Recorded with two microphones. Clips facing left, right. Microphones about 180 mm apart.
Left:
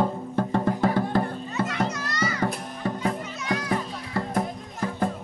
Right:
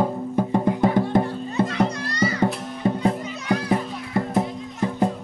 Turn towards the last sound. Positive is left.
turn(degrees=-20)  # may be behind; listen again after turning